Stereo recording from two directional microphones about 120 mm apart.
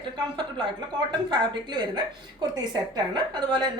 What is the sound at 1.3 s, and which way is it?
A woman's voice, 40° right (ahead or behind).